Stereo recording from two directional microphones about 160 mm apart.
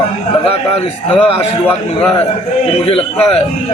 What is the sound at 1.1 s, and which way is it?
Speech, 35° left (ahead or behind).